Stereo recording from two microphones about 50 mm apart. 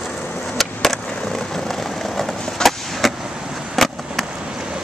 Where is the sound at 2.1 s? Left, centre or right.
Centre.